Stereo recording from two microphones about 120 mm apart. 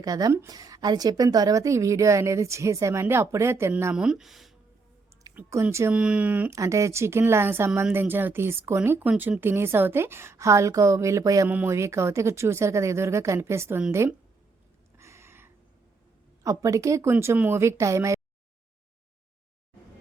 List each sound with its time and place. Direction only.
0.0 s a woman's voice: 30° right (ahead or behind)
3.9 s speech: 5° right (ahead or behind)
5.6 s a woman's voice: 20° right (ahead or behind)
5.9 s speech: 10° right (ahead or behind)
6.6 s a woman's voice: 25° right (ahead or behind)
11.4 s a woman's voice: 15° right (ahead or behind)
14.9 s a sound: 25° right (ahead or behind)
16.4 s a woman's voice: 25° right (ahead or behind)